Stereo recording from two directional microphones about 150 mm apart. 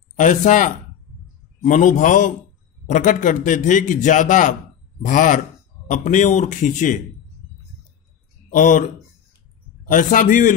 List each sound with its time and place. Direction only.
0.2 s a man's voice: 55° left (ahead or behind)
8.5 s speech: 60° left (ahead or behind)
9.8 s a man's voice: 60° left (ahead or behind)